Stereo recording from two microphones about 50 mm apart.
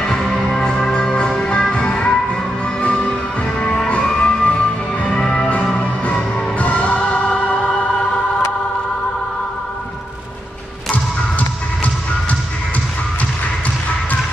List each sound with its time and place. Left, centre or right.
0.0 s music: centre
6.6 s music: left
11.3 s music: left